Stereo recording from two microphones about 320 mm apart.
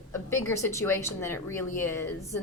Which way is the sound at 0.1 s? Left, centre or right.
Centre.